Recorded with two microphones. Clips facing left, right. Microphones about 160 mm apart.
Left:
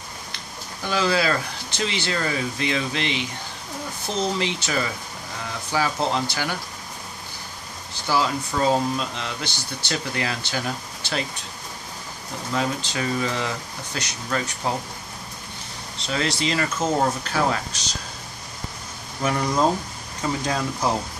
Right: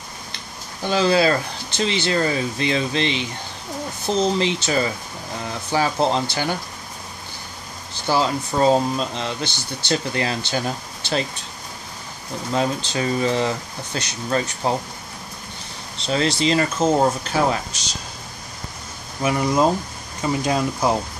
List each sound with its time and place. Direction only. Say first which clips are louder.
0.8 s speech: right 5 dB; 30° right (ahead or behind)
4.4 s speech: right 5 dB; 30° right (ahead or behind)
8.1 s speech: right 3 dB; 30° right (ahead or behind)
12.5 s speech: right 3 dB; 30° right (ahead or behind)
16.1 s speech: right 5 dB; 30° right (ahead or behind)
19.2 s speech: right 3 dB; 10° right (ahead or behind)